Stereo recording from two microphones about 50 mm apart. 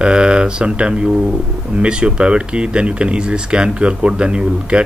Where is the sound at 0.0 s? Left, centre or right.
Centre.